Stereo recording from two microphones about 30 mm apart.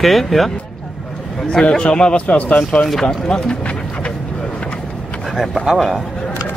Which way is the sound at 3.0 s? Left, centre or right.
Left.